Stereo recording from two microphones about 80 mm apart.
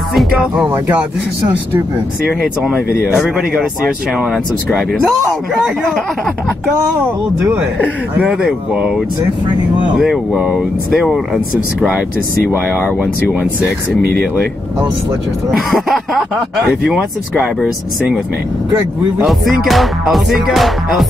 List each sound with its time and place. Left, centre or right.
0.7 s speech: right
2.2 s speech: centre
8.3 s speech: centre
13.0 s speech: centre
15.7 s speech: centre
19.1 s speech: centre